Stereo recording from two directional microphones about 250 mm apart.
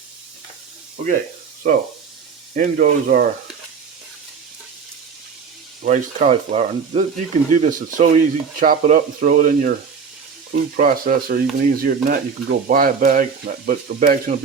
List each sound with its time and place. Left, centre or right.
1.6 s speech: right
5.8 s speech: right
10.8 s speech: right